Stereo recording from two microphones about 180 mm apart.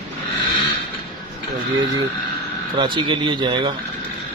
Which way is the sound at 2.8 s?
25° right (ahead or behind).